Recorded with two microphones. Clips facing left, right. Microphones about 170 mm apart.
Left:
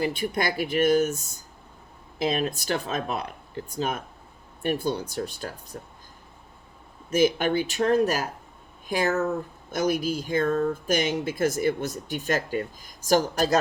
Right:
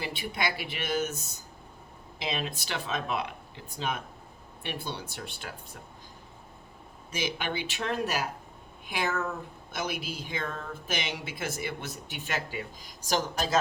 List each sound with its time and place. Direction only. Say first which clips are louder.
0.0 s speech: left 7 dB; 45° left (ahead or behind)
7.1 s speech: left 11 dB; 50° left (ahead or behind)